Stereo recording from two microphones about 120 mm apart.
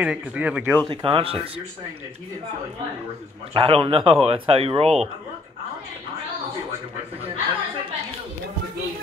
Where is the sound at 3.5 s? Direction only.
50° right (ahead or behind).